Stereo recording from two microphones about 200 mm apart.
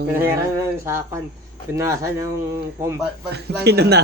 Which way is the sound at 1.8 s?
15° right (ahead or behind).